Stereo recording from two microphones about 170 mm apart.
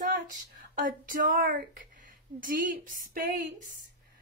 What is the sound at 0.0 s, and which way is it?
Speech, 50° right (ahead or behind).